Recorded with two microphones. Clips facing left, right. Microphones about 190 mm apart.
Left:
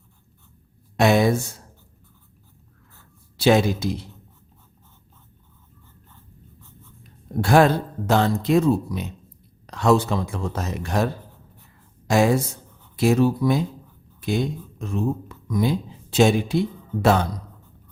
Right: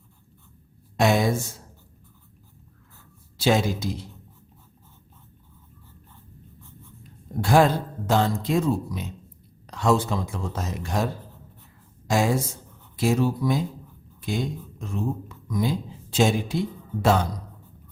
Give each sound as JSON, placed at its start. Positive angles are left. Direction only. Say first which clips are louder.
{"t": 0.9, "sound": "speech", "louder": "left 3 dB", "side_deg": 65}
{"t": 3.3, "sound": "speech", "louder": "left 4 dB", "side_deg": 65}
{"t": 7.4, "sound": "speech", "louder": "left 2 dB", "side_deg": 65}